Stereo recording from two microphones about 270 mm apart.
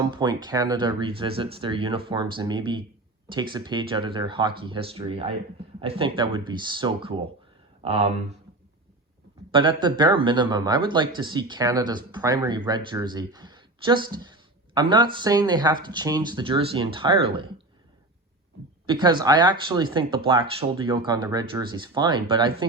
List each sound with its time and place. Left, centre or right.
0.0 s speech: centre
9.5 s speech: centre
18.9 s speech: centre